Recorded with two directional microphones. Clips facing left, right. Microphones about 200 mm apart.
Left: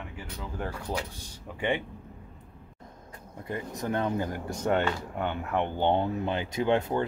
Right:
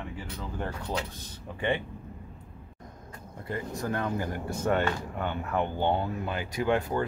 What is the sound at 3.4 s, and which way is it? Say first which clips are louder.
Speech: even; 20° left (ahead or behind).